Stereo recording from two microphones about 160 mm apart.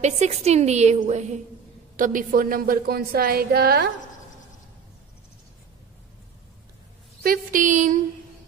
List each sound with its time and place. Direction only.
0.0 s a woman's voice: 45° right (ahead or behind); by 3.9 s 80° right
7.2 s a woman's voice: 55° right (ahead or behind)